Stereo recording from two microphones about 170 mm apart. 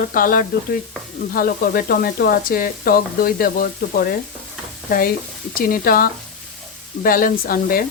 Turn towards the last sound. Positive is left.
turn(degrees=60)  # may be behind; listen again after turning